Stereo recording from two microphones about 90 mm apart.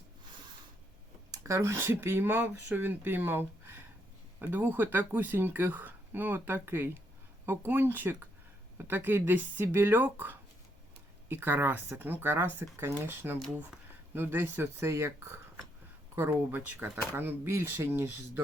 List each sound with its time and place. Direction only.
1.3 s speech: 35° right (ahead or behind)